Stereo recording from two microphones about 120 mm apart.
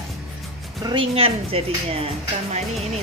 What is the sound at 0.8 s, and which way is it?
Speech, 50° right (ahead or behind).